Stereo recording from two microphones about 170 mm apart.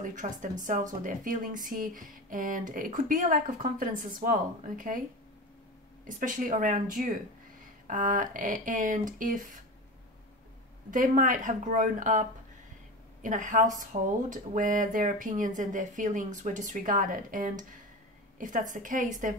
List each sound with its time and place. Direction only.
0.0 s speech: 50° right (ahead or behind)
6.0 s speech: 50° right (ahead or behind)
10.9 s speech: 50° right (ahead or behind)